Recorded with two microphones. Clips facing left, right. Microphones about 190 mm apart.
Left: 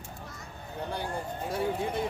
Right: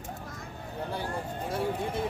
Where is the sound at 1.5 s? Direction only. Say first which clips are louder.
Left 1 dB; centre (ahead or behind).